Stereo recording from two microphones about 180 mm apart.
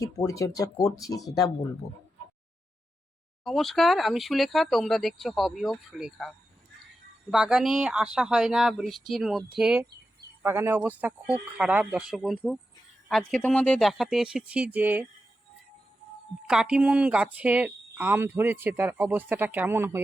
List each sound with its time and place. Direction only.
0.0 s speech: 20° left (ahead or behind)
3.4 s speech: centre (ahead or behind)
16.5 s speech: 5° right (ahead or behind)